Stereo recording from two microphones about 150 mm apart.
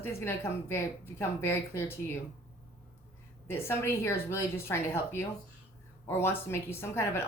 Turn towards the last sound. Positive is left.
turn(degrees=15)  # may be behind; listen again after turning